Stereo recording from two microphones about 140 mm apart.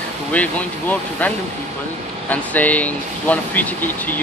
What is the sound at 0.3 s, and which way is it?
Speech, 10° left (ahead or behind).